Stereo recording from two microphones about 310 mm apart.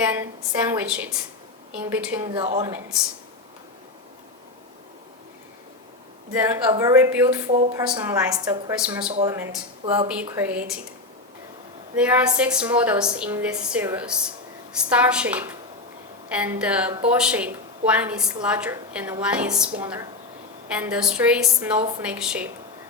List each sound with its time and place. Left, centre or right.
0.0 s a woman's voice: centre
6.4 s a woman's voice: centre
11.9 s a woman's voice: centre
21.8 s a woman's voice: centre
22.0 s a woman's voice: centre